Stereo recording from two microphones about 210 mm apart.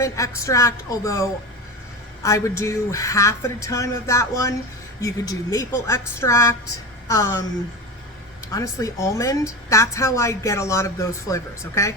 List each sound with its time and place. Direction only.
0.0 s a woman's voice: 15° left (ahead or behind)
8.5 s a woman's voice: 15° left (ahead or behind)